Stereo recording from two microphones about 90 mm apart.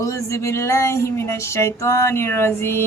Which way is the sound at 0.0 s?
35° left (ahead or behind).